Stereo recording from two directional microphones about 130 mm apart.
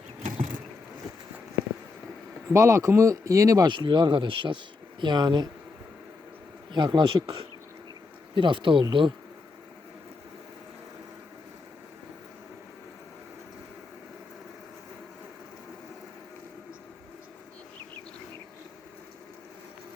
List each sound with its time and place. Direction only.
2.5 s speech: 25° right (ahead or behind)
6.7 s speech: 35° right (ahead or behind)